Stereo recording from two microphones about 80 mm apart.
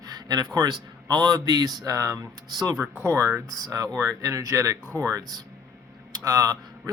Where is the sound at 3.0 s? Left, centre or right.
Right.